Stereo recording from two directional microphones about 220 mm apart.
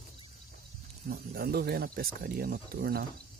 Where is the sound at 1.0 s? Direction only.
45° right (ahead or behind).